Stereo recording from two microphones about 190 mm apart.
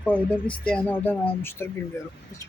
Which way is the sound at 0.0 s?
5° left (ahead or behind).